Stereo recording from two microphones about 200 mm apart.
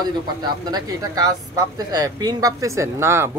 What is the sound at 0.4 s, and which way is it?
Speech, 20° right (ahead or behind).